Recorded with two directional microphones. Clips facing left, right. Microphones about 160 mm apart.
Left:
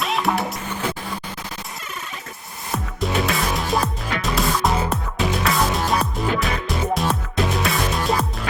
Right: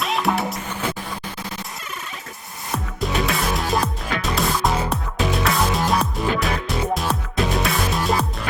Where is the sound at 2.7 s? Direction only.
Centre (ahead or behind).